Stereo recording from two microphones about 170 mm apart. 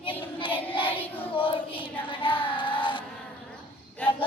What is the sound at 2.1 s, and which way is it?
Child singing, 30° left (ahead or behind).